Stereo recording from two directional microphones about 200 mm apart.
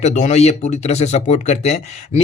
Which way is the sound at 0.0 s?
35° left (ahead or behind).